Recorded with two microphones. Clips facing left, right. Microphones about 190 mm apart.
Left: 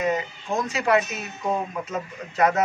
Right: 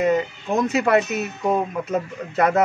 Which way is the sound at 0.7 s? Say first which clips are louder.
Right 3 dB; 60° right (ahead or behind).